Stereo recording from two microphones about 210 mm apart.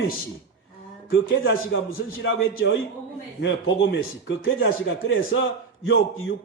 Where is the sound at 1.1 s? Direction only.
65° left (ahead or behind).